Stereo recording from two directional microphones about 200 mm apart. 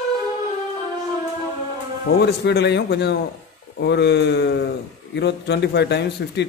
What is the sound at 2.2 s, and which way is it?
Speech, 55° left (ahead or behind).